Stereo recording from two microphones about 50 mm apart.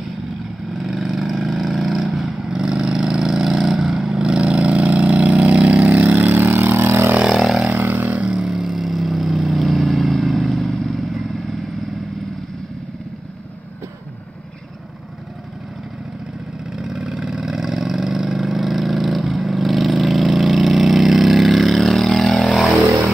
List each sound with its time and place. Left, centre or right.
0.7 s vehicle: centre
4.2 s vehicle: centre; by 7.2 s right
7.3 s vehicle: centre
7.8 s a sound: right
8.3 s vehicle: centre
16.7 s vehicle: centre